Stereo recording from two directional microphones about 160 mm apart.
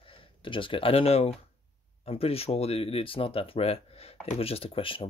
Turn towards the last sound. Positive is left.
turn(degrees=35)  # may be behind; listen again after turning